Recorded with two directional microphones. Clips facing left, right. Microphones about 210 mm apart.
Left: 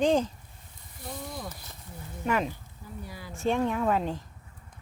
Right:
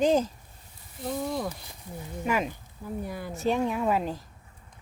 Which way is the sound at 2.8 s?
55° right (ahead or behind).